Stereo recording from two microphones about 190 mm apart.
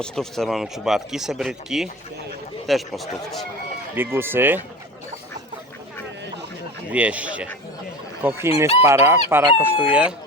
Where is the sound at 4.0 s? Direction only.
10° right (ahead or behind).